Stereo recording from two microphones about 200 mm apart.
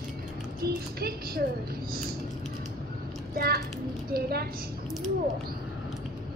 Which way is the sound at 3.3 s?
50° right (ahead or behind).